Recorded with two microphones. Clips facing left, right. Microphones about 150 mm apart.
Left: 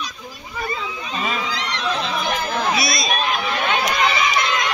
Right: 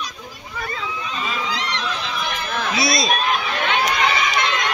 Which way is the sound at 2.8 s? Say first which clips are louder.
Right 3 dB; 25° right (ahead or behind).